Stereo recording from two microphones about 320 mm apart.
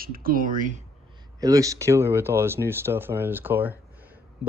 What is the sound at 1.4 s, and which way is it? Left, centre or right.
Speech, centre.